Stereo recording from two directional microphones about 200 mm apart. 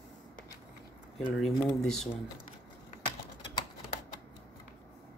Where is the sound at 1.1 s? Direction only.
Centre (ahead or behind).